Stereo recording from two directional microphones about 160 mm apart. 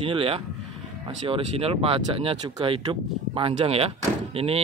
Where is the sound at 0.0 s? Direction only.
35° right (ahead or behind).